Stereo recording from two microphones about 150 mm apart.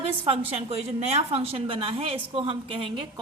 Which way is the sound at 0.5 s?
45° right (ahead or behind).